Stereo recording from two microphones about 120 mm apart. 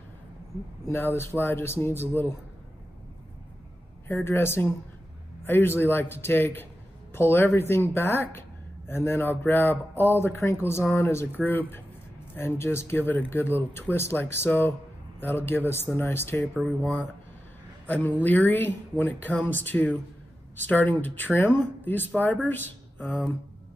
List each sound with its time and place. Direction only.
0.8 s speech: 20° left (ahead or behind)
4.1 s speech: 20° left (ahead or behind)
16.6 s a man's voice: 10° left (ahead or behind)